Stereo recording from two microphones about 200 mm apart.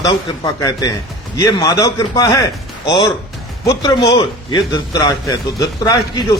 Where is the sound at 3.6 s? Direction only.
20° left (ahead or behind).